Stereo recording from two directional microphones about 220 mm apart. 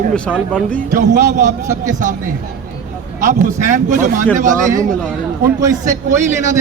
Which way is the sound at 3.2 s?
35° right (ahead or behind).